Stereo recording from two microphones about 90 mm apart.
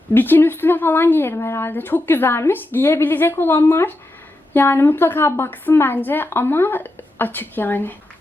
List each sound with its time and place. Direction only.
0.1 s speech: 25° left (ahead or behind)